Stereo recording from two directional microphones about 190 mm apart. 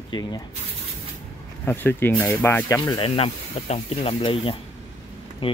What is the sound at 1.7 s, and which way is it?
Speech, 10° left (ahead or behind).